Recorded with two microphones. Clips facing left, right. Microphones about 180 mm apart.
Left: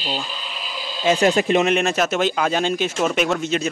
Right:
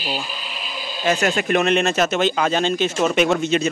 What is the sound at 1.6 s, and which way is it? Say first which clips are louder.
Speech: right 1 dB; 10° left (ahead or behind).